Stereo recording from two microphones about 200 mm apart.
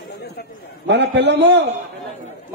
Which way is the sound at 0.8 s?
60° right (ahead or behind).